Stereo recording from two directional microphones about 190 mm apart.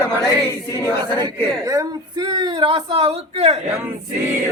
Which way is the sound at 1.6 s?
15° right (ahead or behind).